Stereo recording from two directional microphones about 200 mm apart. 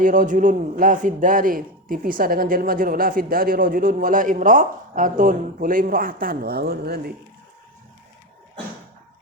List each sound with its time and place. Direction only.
0.0 s speech: 40° right (ahead or behind)